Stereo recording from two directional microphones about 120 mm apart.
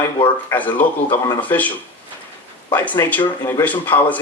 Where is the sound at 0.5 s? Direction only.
15° left (ahead or behind).